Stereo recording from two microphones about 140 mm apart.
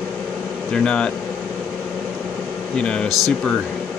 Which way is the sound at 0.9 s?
5° left (ahead or behind).